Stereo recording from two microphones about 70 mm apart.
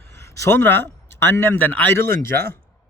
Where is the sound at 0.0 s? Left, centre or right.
Left.